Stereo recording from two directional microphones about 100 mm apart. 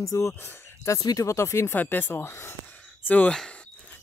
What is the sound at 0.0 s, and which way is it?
Speech, 30° left (ahead or behind).